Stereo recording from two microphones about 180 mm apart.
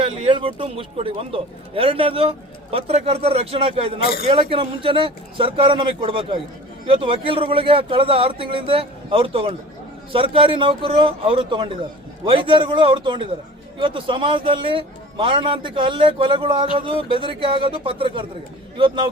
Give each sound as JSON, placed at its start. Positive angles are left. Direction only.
{"t": 0.0, "sound": "a man's voice", "side_deg": -30}